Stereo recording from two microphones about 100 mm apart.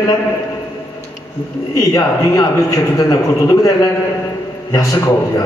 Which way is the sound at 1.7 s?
35° left (ahead or behind).